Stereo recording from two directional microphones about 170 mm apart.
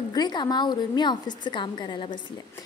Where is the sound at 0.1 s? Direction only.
25° left (ahead or behind).